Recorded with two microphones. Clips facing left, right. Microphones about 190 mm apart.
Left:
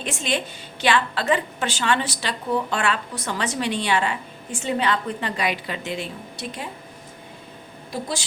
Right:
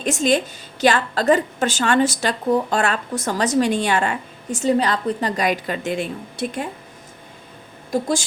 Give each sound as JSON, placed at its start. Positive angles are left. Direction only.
{"t": 0.0, "sound": "a woman's voice", "side_deg": -45}
{"t": 7.9, "sound": "a woman's voice", "side_deg": -45}